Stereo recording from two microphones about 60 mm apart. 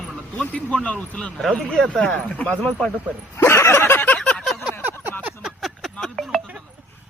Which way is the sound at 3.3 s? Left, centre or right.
Left.